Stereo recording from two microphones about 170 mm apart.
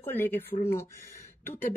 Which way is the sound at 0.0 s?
10° left (ahead or behind).